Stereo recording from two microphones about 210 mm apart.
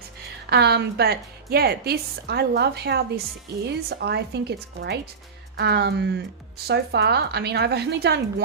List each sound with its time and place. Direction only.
0.5 s a woman's voice: 50° right (ahead or behind)